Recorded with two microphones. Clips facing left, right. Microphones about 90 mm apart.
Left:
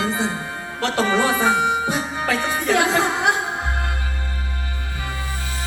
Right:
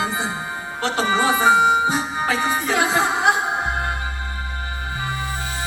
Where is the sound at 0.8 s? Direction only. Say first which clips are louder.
Left 1 dB; 5° right (ahead or behind).